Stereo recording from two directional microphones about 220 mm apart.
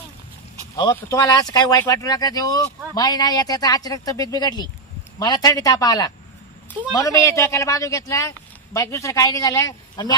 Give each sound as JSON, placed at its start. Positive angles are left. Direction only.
{"t": 0.9, "sound": "speech", "side_deg": 15}